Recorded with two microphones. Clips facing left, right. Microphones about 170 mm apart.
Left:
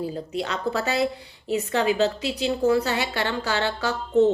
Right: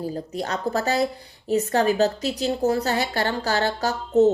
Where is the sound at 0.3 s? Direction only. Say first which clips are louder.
Right 1 dB; 45° right (ahead or behind).